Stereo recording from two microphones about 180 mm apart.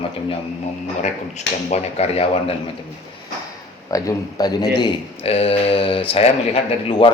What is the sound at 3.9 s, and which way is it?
Speech, 20° left (ahead or behind).